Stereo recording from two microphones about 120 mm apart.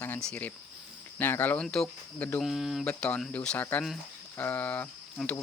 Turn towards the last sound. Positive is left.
turn(degrees=15)  # may be behind; listen again after turning